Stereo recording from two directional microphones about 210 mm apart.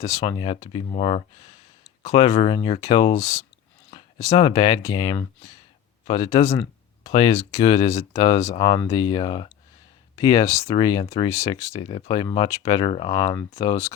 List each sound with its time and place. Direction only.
0.0 s speech: 15° left (ahead or behind)
11.3 s speech: 15° left (ahead or behind)
11.9 s speech: 25° left (ahead or behind)